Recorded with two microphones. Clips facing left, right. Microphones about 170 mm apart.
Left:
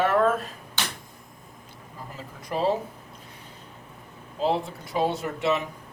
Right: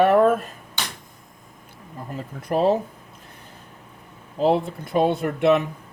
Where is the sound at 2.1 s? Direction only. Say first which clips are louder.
Right 7 dB; 55° right (ahead or behind).